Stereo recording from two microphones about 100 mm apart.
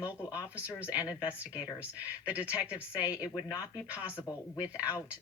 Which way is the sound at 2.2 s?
15° right (ahead or behind).